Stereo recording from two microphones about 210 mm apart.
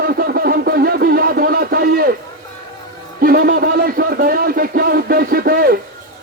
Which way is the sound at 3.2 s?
45° right (ahead or behind).